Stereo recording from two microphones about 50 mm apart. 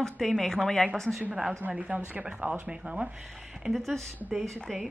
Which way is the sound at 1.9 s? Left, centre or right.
Right.